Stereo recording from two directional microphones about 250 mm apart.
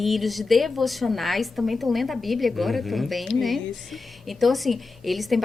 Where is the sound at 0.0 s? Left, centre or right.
Centre.